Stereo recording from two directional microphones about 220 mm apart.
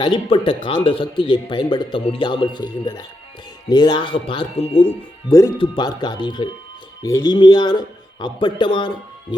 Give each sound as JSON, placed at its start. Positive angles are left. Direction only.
{"t": 0.0, "sound": "speech", "side_deg": 20}